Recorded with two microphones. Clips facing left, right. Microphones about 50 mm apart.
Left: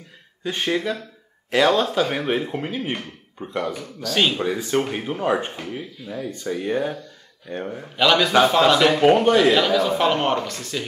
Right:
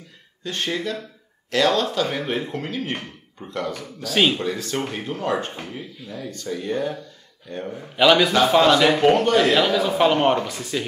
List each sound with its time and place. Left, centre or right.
0.4 s speech: centre
4.0 s a man's voice: centre
4.4 s speech: centre
7.9 s a man's voice: centre
9.0 s speech: centre
9.3 s a man's voice: centre